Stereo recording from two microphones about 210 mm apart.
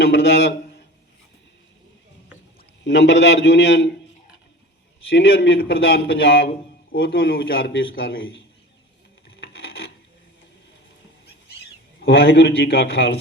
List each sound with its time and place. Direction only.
0.0 s a man's voice: 55° left (ahead or behind)
2.8 s a man's voice: 55° left (ahead or behind)
5.1 s a man's voice: 50° left (ahead or behind)
6.9 s a man's voice: 65° left (ahead or behind)
7.2 s a man's voice: 45° left (ahead or behind)
9.5 s filing: 50° left (ahead or behind)
11.9 s a man's voice: 50° left (ahead or behind)